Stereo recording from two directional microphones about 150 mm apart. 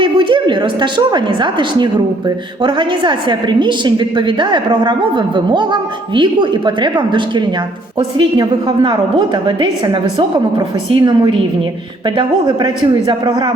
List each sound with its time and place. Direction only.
0.0 s a woman's voice: 35° right (ahead or behind)